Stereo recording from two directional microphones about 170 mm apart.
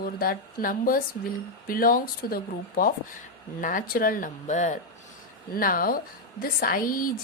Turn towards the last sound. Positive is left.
turn(degrees=55)  # may be behind; listen again after turning